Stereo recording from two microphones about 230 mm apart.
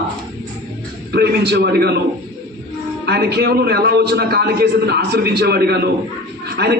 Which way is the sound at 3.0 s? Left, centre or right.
Right.